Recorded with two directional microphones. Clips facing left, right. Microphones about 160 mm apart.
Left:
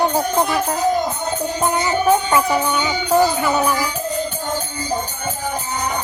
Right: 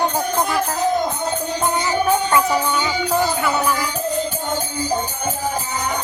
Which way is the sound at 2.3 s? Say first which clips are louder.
Left 1 dB; 15° left (ahead or behind).